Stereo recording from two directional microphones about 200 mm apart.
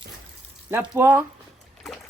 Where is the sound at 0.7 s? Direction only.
10° right (ahead or behind).